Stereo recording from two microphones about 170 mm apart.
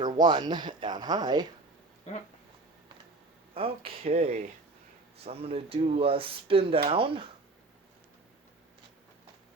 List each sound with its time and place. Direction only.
0.0 s speech: 25° right (ahead or behind)
3.5 s speech: 35° right (ahead or behind)